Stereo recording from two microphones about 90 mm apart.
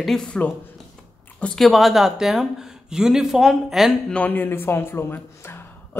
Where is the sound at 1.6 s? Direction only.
Centre (ahead or behind).